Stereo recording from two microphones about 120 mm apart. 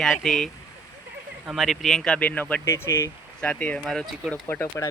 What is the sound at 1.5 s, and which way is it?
Speech, centre (ahead or behind).